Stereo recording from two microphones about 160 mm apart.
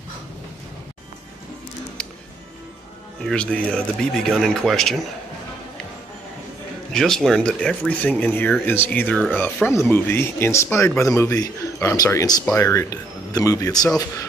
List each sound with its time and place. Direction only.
3.2 s speech: 5° left (ahead or behind)
6.9 s a man's voice: centre (ahead or behind); by 13.8 s 20° left (ahead or behind)